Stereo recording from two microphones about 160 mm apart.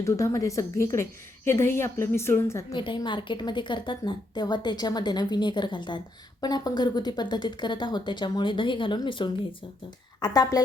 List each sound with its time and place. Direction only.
0.0 s a woman's voice: 20° left (ahead or behind)
2.7 s a woman's voice: 30° left (ahead or behind)